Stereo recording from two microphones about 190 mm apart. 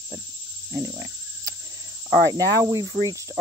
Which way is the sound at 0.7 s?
15° right (ahead or behind).